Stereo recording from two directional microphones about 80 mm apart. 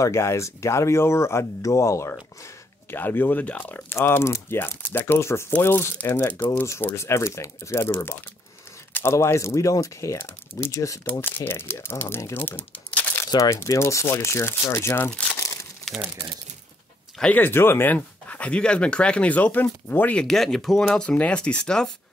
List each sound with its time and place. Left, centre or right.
0.0 s speech: left
2.4 s speech: left
8.9 s speech: left
11.1 s speech: left
12.4 s crumpling: centre
13.4 s speech: left
15.3 s crumpling: left
17.2 s speech: left
20.2 s speech: centre